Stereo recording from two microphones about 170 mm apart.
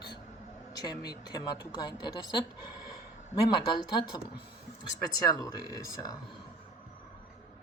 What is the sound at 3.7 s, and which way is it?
Speech, 25° left (ahead or behind).